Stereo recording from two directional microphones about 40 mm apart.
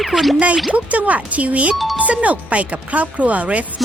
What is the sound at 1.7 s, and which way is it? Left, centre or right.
Speech, centre.